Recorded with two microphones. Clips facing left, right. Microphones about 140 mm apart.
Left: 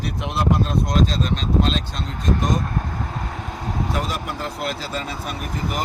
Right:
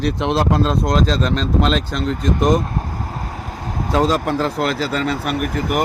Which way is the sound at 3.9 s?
90° right.